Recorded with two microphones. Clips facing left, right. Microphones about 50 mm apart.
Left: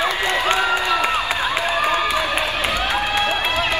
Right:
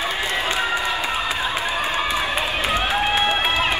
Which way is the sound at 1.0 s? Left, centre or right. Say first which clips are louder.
Left 3 dB; left.